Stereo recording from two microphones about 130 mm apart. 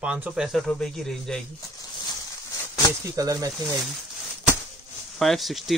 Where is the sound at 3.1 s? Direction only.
30° right (ahead or behind).